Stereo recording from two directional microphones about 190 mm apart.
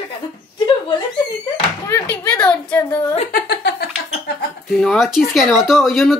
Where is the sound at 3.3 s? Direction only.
60° left (ahead or behind).